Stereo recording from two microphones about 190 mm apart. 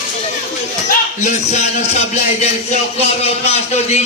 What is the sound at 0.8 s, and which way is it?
A man's voice, 40° left (ahead or behind).